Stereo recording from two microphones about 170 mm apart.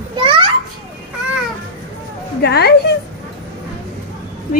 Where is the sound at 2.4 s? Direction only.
70° left (ahead or behind).